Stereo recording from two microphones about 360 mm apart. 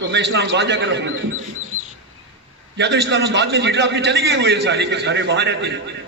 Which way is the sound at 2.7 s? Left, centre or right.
Right.